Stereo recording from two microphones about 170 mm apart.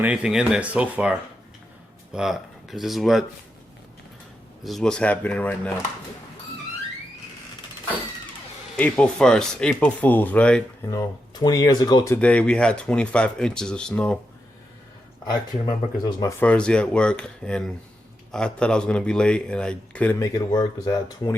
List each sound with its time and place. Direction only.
0.0 s speech: 5° right (ahead or behind)
2.1 s speech: centre (ahead or behind)
4.6 s speech: centre (ahead or behind)
8.7 s speech: 5° left (ahead or behind)
10.9 s speech: 20° left (ahead or behind)
12.1 s speech: 5° left (ahead or behind)
15.3 s speech: 20° left (ahead or behind)
16.4 s speech: 5° left (ahead or behind)
20.1 s speech: 20° left (ahead or behind)